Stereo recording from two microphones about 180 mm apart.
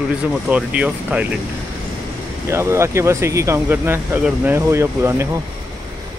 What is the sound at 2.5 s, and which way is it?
Speech, 15° right (ahead or behind).